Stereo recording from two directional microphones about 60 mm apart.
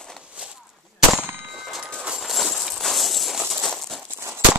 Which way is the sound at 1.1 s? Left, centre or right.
Right.